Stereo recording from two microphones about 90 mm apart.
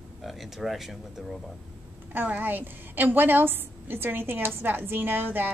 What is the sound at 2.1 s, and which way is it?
A woman's voice, 20° right (ahead or behind).